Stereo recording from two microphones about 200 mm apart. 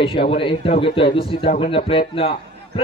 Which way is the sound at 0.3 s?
25° left (ahead or behind).